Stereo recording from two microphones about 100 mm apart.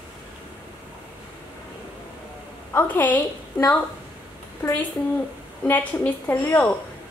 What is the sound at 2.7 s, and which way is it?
Speech, 15° left (ahead or behind).